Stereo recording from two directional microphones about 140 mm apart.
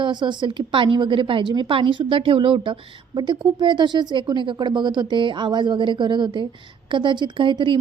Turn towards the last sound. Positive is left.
turn(degrees=-35)  # may be behind; listen again after turning